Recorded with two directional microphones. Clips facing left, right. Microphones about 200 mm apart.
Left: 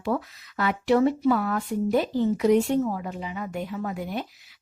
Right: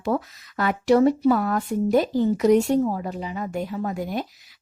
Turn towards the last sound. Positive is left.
turn(degrees=-40)  # may be behind; listen again after turning